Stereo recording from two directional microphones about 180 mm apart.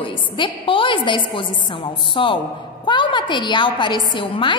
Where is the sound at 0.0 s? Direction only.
30° left (ahead or behind).